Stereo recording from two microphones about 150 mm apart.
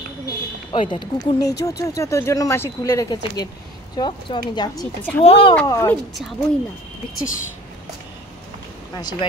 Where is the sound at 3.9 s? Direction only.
30° left (ahead or behind).